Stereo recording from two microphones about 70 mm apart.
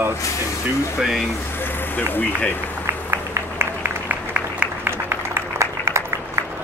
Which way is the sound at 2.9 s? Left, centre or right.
Right.